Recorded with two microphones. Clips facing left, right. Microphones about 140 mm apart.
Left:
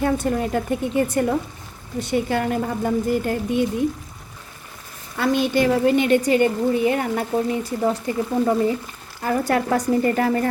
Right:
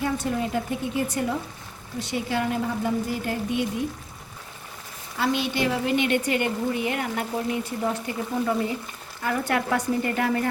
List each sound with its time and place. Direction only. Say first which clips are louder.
0.0 s a woman's voice: left 5 dB; 50° left (ahead or behind)
5.1 s a woman's voice: left 6 dB; 50° left (ahead or behind)